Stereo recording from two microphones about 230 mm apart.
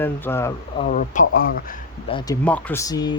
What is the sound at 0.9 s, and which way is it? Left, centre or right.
Speech, left.